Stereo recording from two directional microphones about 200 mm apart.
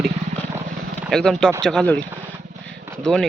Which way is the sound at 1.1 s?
5° left (ahead or behind).